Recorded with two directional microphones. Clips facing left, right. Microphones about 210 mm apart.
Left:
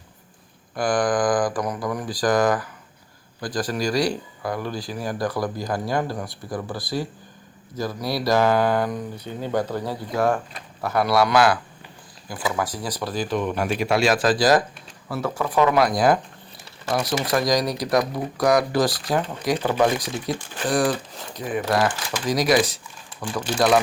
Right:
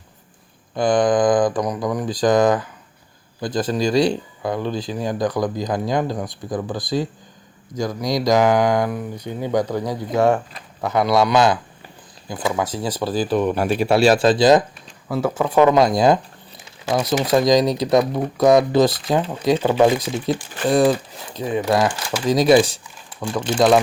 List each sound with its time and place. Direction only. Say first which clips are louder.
0.8 s speech: right 5 dB; 25° right (ahead or behind)
17.3 s speech: right 6 dB; 25° right (ahead or behind)